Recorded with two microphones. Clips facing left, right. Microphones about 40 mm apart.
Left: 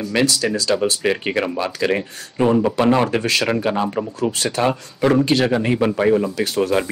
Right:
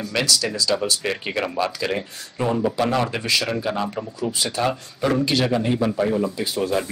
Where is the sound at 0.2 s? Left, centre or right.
Left.